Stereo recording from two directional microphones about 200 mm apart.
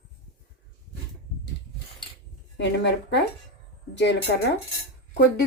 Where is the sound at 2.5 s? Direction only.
60° left (ahead or behind).